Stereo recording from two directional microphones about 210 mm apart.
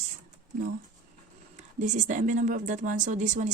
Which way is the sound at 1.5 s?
35° right (ahead or behind).